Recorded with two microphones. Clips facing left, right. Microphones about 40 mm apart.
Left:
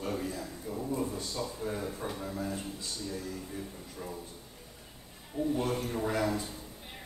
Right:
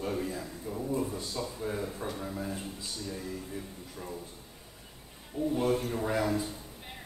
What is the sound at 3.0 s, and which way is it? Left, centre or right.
Speech, centre.